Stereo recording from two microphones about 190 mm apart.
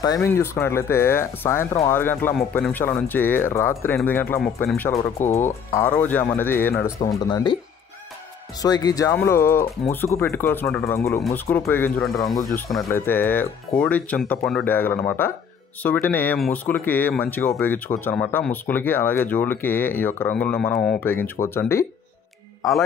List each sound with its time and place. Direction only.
0.0 s speech: 15° left (ahead or behind)
7.2 s speech: 25° left (ahead or behind)
8.6 s speech: 20° left (ahead or behind)
12.0 s speech: centre (ahead or behind)
12.9 s speech: 10° left (ahead or behind)